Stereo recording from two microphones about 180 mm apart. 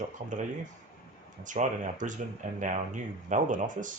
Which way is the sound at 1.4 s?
45° right (ahead or behind).